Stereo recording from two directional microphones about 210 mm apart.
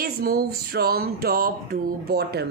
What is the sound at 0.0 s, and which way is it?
Speech, 45° right (ahead or behind).